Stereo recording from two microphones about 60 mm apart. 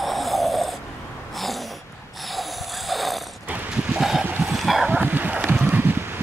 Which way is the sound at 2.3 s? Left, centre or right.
Centre.